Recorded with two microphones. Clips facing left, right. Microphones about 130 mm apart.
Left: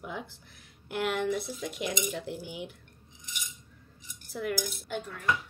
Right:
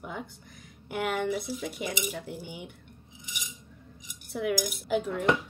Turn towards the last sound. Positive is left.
turn(degrees=-25)  # may be behind; listen again after turning